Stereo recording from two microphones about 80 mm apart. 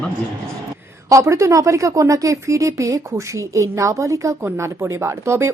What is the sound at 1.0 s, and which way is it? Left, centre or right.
Speech, right.